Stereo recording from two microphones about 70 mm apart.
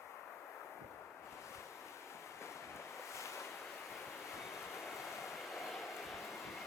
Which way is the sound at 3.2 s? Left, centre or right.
Left.